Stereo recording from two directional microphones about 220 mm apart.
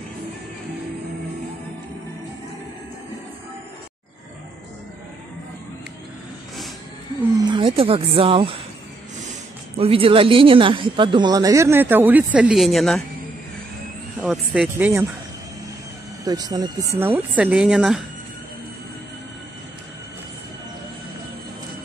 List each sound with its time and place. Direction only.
7.3 s speech: 20° right (ahead or behind)
9.8 s speech: 25° right (ahead or behind); by 13.0 s centre (ahead or behind)
14.2 s speech: centre (ahead or behind)
16.3 s speech: 15° right (ahead or behind)